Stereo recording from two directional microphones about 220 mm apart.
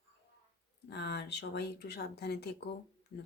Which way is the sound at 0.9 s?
50° left (ahead or behind).